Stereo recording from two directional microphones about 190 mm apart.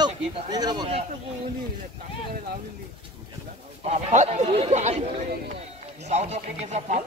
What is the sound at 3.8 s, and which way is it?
Speech, 35° right (ahead or behind).